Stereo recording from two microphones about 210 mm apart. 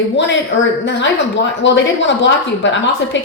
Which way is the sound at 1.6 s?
60° left (ahead or behind).